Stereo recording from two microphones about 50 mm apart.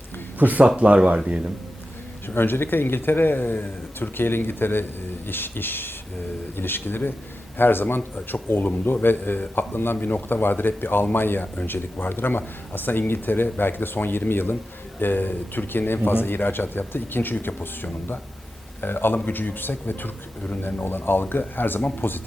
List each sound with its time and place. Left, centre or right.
0.3 s speech: right
2.2 s speech: left
18.8 s speech: left
21.8 s speech: left